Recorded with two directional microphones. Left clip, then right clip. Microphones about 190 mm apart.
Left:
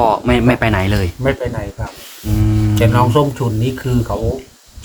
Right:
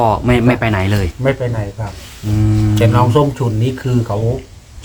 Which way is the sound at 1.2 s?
Centre (ahead or behind).